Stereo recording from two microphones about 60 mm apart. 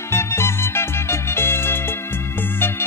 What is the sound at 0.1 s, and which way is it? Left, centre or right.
Music, left.